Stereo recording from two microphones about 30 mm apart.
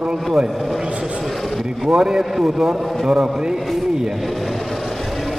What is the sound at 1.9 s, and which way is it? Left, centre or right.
A man's voice, right.